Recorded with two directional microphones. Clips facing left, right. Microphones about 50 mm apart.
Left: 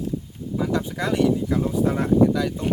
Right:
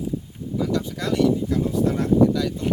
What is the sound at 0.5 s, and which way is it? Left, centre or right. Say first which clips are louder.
Speech: even; left.